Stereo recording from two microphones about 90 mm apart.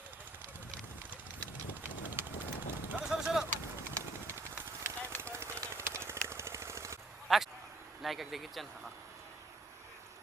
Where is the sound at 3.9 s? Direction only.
25° right (ahead or behind).